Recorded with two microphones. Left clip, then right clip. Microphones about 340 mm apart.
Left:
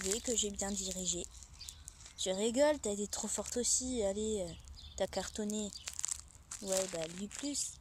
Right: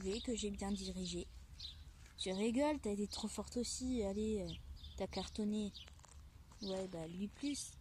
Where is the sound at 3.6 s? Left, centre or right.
Centre.